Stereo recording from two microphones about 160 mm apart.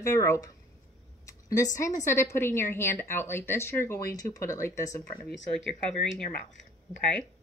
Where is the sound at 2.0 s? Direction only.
15° left (ahead or behind).